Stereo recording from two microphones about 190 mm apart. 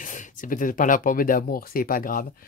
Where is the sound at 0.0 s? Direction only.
40° left (ahead or behind).